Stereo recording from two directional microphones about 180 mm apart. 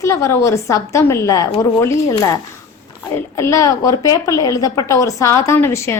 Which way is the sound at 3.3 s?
15° left (ahead or behind).